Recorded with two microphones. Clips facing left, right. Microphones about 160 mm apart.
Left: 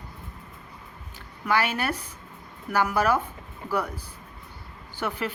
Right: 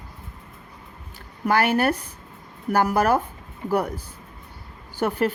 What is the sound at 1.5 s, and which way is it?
Speech, 45° right (ahead or behind).